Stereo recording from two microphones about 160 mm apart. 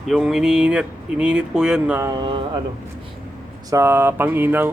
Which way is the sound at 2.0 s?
25° right (ahead or behind).